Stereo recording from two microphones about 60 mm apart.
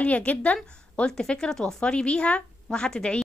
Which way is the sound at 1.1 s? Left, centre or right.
Centre.